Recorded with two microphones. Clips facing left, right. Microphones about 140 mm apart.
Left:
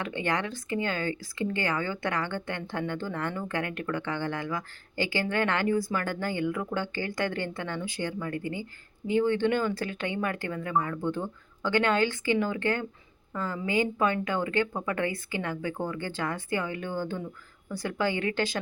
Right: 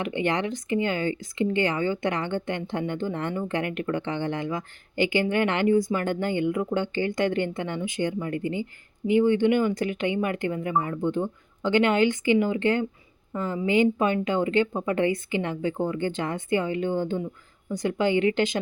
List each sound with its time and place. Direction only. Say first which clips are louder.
0.0 s speech: right 4 dB; 20° right (ahead or behind)